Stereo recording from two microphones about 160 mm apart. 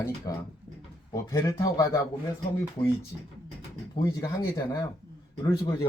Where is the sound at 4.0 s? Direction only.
25° left (ahead or behind).